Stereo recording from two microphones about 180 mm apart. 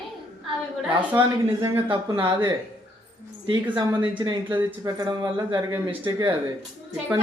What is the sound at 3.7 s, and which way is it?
Speech, 25° right (ahead or behind).